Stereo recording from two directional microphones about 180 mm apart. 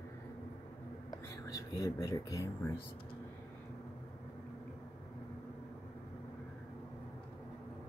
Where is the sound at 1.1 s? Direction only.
20° left (ahead or behind).